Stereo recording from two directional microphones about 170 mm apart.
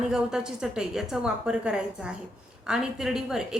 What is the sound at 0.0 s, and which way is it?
A woman's voice, 5° right (ahead or behind).